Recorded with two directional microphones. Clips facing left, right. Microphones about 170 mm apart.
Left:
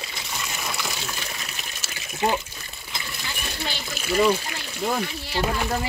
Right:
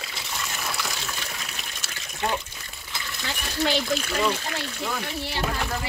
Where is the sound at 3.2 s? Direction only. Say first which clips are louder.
Right 8 dB; 90° right.